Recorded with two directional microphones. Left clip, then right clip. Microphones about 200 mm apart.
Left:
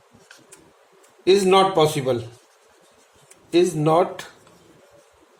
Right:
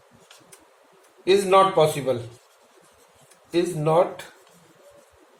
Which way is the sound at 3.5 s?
55° left (ahead or behind).